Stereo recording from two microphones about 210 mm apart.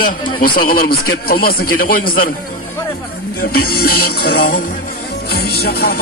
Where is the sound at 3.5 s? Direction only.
45° left (ahead or behind).